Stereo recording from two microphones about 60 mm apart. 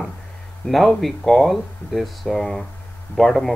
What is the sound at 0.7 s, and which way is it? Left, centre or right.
Speech, centre.